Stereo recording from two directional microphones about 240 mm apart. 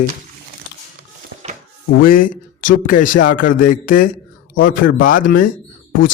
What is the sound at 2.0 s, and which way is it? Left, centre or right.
Speech, left.